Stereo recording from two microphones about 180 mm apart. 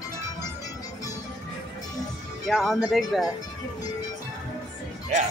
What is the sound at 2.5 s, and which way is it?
Speech, centre (ahead or behind).